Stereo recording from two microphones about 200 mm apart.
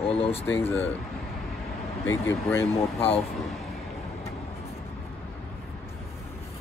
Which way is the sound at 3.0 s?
30° left (ahead or behind).